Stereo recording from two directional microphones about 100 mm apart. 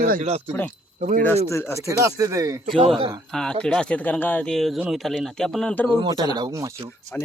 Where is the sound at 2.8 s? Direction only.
70° right (ahead or behind).